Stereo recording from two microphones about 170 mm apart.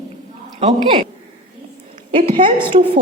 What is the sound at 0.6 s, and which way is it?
Speech, 35° right (ahead or behind).